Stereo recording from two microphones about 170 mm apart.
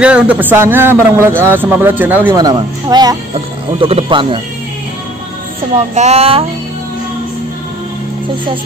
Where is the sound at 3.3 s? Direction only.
35° right (ahead or behind).